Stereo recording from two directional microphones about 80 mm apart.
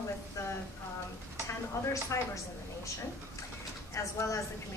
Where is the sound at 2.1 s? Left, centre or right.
Left.